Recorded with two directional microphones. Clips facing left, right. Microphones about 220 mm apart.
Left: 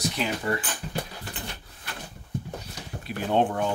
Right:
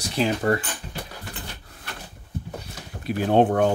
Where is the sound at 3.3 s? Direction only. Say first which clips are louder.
Right 6 dB; 60° right (ahead or behind).